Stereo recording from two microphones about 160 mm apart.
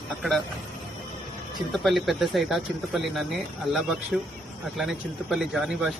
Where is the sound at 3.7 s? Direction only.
30° left (ahead or behind).